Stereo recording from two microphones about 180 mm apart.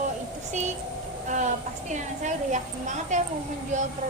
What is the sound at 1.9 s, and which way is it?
A woman's voice, 40° right (ahead or behind).